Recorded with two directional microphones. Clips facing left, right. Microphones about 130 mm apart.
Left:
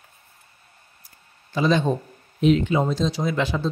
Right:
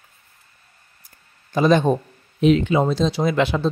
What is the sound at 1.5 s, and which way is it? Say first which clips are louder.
Speech: right 4 dB; 50° right (ahead or behind).